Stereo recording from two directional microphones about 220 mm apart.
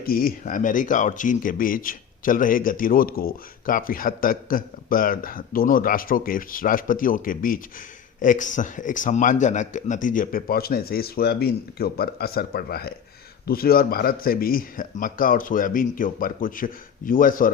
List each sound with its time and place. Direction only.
0.0 s speech: 40° left (ahead or behind)